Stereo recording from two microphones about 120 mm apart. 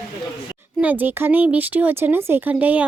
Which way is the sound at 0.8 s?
15° right (ahead or behind).